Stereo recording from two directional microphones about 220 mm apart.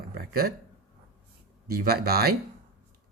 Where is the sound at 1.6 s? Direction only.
45° right (ahead or behind).